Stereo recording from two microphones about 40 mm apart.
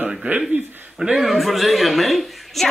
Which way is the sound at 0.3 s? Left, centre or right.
Right.